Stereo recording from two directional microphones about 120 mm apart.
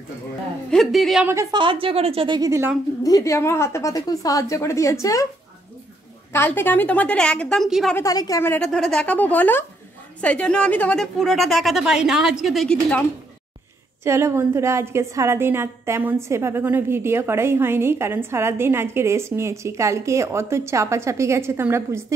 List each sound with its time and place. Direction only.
0.7 s a woman's voice: 5° left (ahead or behind)
1.2 s a woman's voice: 20° right (ahead or behind)
1.5 s a woman's voice: 45° right (ahead or behind)
3.0 s a woman's voice: 30° left (ahead or behind)
6.3 s a woman's voice: 15° left (ahead or behind); by 7.9 s centre (ahead or behind)
8.0 s a woman's voice: 30° left (ahead or behind)
8.5 s a woman's voice: 5° left (ahead or behind)
11.1 s a woman's voice: centre (ahead or behind)
14.0 s a woman's voice: 20° right (ahead or behind)